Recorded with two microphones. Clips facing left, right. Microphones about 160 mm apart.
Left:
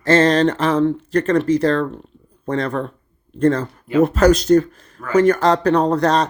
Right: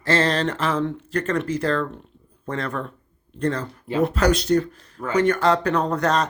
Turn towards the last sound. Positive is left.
turn(degrees=35)  # may be behind; listen again after turning